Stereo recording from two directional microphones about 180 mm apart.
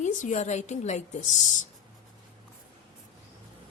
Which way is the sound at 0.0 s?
45° left (ahead or behind).